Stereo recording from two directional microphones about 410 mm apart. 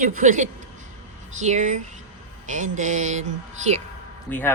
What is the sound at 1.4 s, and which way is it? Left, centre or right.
Mantra, centre.